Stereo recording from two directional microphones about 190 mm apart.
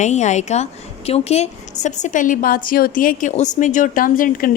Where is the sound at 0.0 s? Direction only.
40° left (ahead or behind).